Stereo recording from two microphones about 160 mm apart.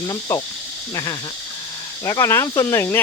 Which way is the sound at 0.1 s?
25° left (ahead or behind).